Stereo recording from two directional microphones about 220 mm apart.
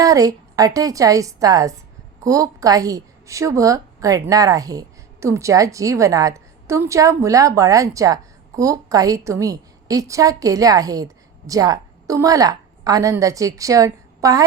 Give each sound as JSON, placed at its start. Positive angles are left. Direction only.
{"t": 0.0, "sound": "a woman's voice", "side_deg": -15}